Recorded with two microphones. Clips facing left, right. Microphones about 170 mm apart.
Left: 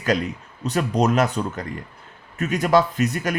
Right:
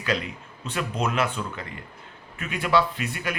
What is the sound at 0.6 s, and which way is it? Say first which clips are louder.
Speech: left 7 dB; 40° left (ahead or behind).